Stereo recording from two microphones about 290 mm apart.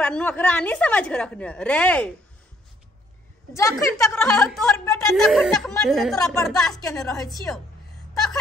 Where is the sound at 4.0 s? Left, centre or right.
Centre.